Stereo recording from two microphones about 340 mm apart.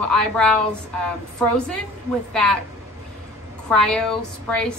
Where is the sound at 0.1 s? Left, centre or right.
Centre.